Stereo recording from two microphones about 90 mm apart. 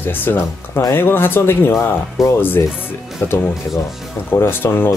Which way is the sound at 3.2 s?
25° left (ahead or behind).